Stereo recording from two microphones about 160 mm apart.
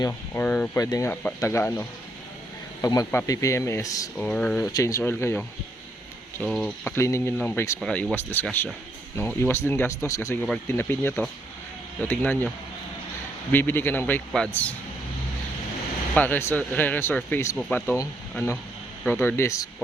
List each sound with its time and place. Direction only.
0.0 s speech: 15° left (ahead or behind)
4.2 s speech: 10° left (ahead or behind)
6.4 s speech: centre (ahead or behind)
6.8 s speech: 15° left (ahead or behind)
7.8 s speech: 5° left (ahead or behind)
13.5 s speech: 15° left (ahead or behind)
16.1 s speech: 10° left (ahead or behind)
19.2 s speech: 15° left (ahead or behind)